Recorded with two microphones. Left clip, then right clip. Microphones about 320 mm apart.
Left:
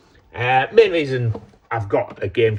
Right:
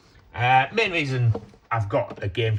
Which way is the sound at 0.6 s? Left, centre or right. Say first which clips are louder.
Left 8 dB; right.